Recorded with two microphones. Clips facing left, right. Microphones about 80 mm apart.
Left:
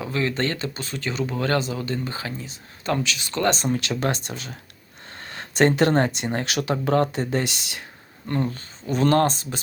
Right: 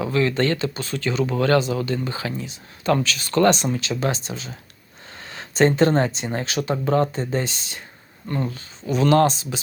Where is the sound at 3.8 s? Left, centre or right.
Left.